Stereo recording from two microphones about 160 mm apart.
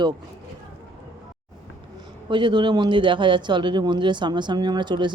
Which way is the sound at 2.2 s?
30° right (ahead or behind).